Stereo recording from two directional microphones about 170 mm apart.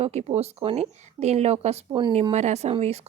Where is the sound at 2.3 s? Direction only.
40° right (ahead or behind).